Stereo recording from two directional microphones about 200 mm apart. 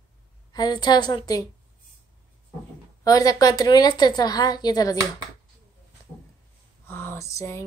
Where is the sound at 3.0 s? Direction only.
20° left (ahead or behind).